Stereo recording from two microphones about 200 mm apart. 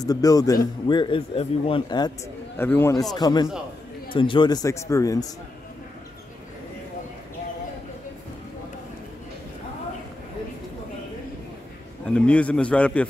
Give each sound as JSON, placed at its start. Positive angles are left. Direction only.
{"t": 0.0, "sound": "a man's voice", "side_deg": 20}
{"t": 12.1, "sound": "a man's voice", "side_deg": 5}